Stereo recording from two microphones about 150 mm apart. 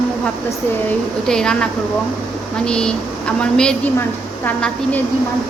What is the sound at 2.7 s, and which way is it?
A woman's voice, 5° left (ahead or behind).